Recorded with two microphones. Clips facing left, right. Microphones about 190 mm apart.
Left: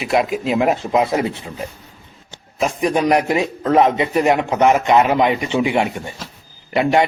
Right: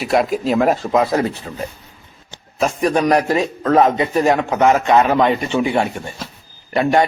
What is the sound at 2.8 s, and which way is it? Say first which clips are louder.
A man's voice: right 1 dB; 15° left (ahead or behind).